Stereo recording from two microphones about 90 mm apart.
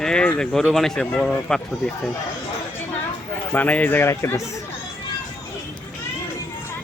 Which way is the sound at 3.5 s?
20° left (ahead or behind).